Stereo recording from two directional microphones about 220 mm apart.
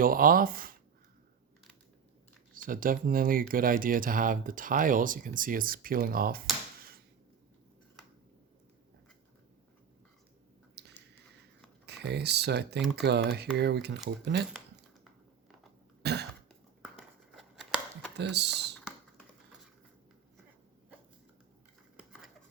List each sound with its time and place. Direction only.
0.0 s speech: 40° right (ahead or behind)
2.6 s speech: 40° right (ahead or behind)
10.8 s a sound: 50° right (ahead or behind)
11.9 s speech: 50° right (ahead or behind)
16.0 s cough: 50° right (ahead or behind)
16.5 s a sound: centre (ahead or behind)
18.2 s speech: 50° right (ahead or behind)